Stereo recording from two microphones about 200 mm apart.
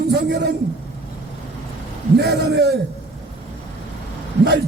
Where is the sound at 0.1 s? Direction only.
55° right (ahead or behind).